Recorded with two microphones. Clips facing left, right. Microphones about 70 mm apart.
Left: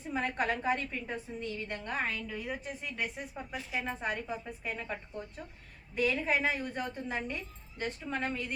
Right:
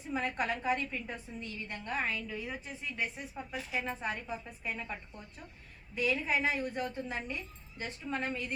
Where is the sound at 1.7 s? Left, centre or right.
Left.